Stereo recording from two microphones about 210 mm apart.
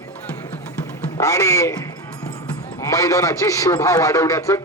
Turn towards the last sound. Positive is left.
turn(degrees=15)  # may be behind; listen again after turning